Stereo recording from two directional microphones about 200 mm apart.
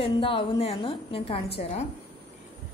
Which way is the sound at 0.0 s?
25° left (ahead or behind).